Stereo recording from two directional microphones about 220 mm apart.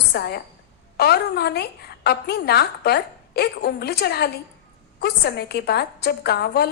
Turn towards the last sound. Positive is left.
turn(degrees=45)  # may be behind; listen again after turning